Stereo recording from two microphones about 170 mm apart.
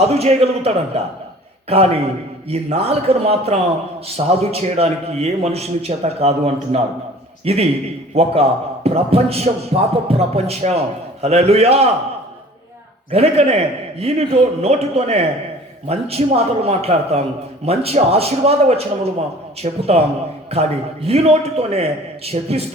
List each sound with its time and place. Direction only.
0.0 s a man's voice: 40° right (ahead or behind)
13.1 s a man's voice: 35° right (ahead or behind)